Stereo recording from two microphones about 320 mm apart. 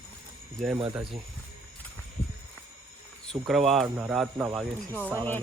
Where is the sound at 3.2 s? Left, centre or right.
Centre.